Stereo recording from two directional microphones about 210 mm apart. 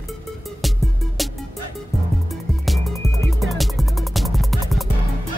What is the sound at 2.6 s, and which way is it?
Music, centre (ahead or behind).